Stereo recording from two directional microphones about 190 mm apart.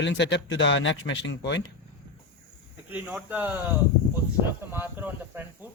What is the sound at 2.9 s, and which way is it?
Speech, 10° right (ahead or behind).